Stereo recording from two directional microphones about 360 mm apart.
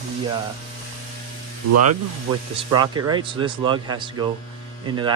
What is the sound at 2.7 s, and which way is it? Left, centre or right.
Speech, centre.